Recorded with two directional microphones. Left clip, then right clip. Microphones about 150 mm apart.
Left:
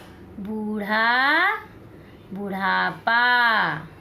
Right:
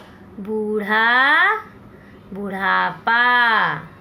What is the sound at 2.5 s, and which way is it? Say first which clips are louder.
A woman's voice: right 4 dB; 45° right (ahead or behind).